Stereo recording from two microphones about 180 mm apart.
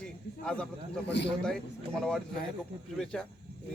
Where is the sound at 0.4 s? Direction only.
5° left (ahead or behind).